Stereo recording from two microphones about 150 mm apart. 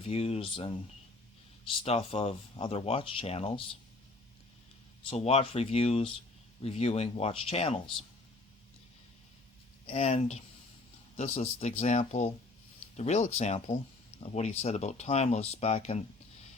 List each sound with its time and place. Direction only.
0.0 s speech: 45° left (ahead or behind)
1.8 s speech: 40° left (ahead or behind)
5.0 s speech: 45° left (ahead or behind)
9.8 s speech: 45° left (ahead or behind)